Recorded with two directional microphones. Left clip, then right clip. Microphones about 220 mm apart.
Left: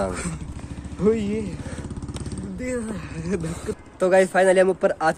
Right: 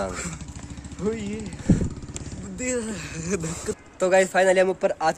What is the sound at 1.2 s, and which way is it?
Speech, 50° left (ahead or behind).